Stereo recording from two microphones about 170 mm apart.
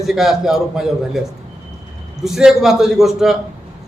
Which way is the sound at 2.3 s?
Centre (ahead or behind).